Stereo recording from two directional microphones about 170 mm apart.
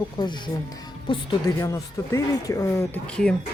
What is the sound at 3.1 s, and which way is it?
Speech, 5° left (ahead or behind).